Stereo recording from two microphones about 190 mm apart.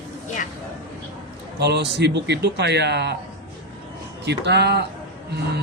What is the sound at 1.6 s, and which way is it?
A man's voice, 60° right (ahead or behind).